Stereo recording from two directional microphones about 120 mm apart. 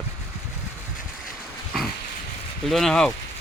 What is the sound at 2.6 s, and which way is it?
Speech, 5° left (ahead or behind).